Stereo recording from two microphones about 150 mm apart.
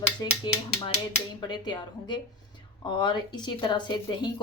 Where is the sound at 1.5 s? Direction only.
30° left (ahead or behind).